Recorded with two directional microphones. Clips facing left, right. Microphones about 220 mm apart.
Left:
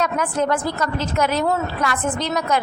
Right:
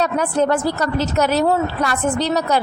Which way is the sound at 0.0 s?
35° right (ahead or behind).